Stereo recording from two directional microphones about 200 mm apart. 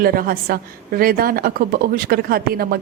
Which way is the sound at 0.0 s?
50° right (ahead or behind).